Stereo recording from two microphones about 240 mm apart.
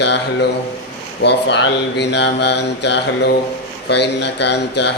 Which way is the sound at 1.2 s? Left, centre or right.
Left.